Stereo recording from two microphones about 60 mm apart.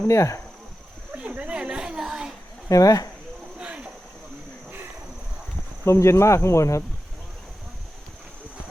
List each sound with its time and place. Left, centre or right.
0.1 s speech: left
1.1 s a sound: right
2.6 s speech: left
3.6 s cricket: right
5.8 s cricket: left